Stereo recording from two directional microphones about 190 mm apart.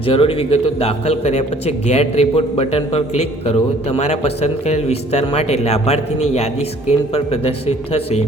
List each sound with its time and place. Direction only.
0.0 s a man's voice: 30° left (ahead or behind)